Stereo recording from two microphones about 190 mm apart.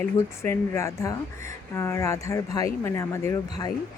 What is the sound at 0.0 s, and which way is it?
Speech, 10° left (ahead or behind).